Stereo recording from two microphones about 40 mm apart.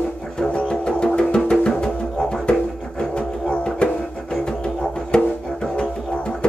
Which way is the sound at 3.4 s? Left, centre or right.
Left.